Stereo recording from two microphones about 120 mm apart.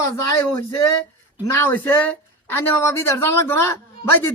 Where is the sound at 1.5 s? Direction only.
20° left (ahead or behind).